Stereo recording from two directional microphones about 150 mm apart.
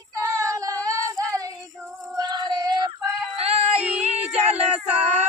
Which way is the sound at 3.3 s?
40° right (ahead or behind).